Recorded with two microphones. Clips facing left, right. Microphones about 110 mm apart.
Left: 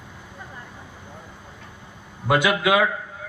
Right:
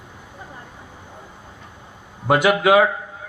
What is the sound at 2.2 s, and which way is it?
Speech, 35° right (ahead or behind).